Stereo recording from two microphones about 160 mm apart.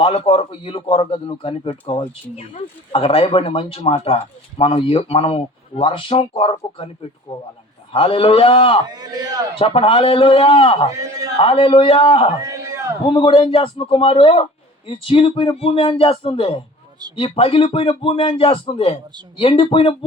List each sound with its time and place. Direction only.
0.0 s speech: 35° left (ahead or behind)
8.9 s a man's voice: 25° right (ahead or behind)
9.6 s speech: 35° left (ahead or behind)
10.9 s a man's voice: 20° right (ahead or behind)
11.3 s speech: 35° left (ahead or behind)
12.4 s a sound: 20° right (ahead or behind)
13.1 s speech: 35° left (ahead or behind)